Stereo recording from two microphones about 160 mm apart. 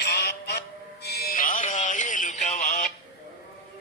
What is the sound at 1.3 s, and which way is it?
Music, 55° left (ahead or behind).